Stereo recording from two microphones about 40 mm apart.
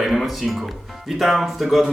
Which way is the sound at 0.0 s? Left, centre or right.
Centre.